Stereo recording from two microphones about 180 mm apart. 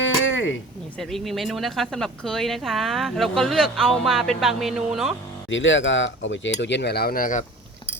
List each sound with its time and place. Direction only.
0.0 s a sound: 90° left
0.9 s speech: centre (ahead or behind)
5.5 s cutlery: 90° left; by 7.4 s 50° left (ahead or behind)